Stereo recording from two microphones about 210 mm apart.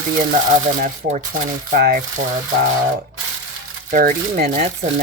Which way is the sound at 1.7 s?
45° right (ahead or behind).